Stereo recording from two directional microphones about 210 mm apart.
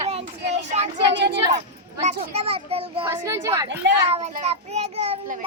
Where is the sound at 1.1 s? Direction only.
55° right (ahead or behind).